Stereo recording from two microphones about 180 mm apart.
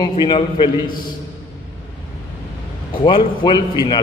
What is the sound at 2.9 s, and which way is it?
Speech, 30° left (ahead or behind).